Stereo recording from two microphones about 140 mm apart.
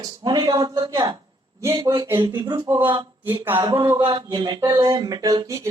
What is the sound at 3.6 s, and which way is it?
Speech, 30° right (ahead or behind).